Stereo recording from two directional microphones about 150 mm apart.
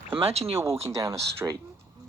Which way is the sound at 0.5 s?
20° right (ahead or behind).